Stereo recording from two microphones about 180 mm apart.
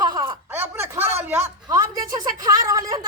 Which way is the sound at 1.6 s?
20° right (ahead or behind).